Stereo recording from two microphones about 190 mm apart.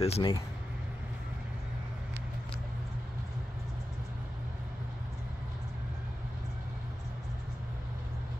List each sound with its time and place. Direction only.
0.0 s speech: 30° left (ahead or behind)